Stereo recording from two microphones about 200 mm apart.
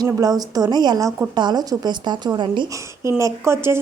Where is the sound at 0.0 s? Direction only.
20° right (ahead or behind).